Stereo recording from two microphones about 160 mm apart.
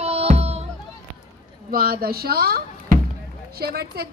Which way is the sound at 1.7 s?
70° right (ahead or behind).